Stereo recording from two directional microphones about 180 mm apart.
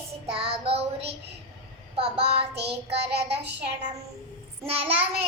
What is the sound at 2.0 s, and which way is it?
Child singing, 35° right (ahead or behind).